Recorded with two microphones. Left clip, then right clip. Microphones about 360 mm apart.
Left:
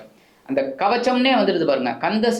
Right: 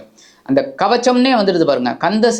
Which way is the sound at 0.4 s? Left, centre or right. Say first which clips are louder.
Right 5 dB; right.